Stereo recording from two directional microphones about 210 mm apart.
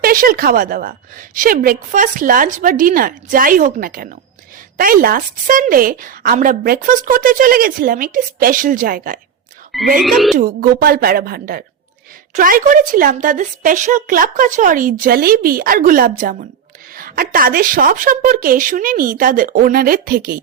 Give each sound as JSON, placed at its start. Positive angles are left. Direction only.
{"t": 0.0, "sound": "a woman's voice", "side_deg": -45}
{"t": 10.0, "sound": "speech", "side_deg": 0}
{"t": 10.3, "sound": "a woman's voice", "side_deg": -45}